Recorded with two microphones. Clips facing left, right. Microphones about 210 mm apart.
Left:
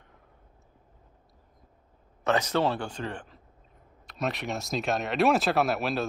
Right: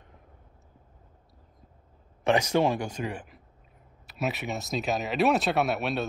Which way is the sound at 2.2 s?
15° right (ahead or behind).